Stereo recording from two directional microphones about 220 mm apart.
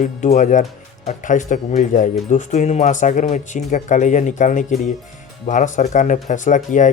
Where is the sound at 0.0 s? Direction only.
35° left (ahead or behind).